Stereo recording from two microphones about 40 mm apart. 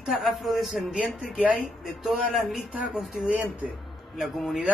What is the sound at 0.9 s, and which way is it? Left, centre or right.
Speech, right.